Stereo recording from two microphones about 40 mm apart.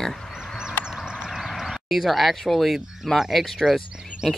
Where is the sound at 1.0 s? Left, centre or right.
Centre.